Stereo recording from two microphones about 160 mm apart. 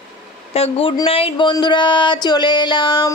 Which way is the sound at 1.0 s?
35° left (ahead or behind).